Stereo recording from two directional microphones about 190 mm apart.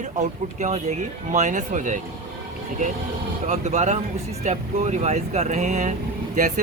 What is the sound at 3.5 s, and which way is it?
Speech, 35° right (ahead or behind).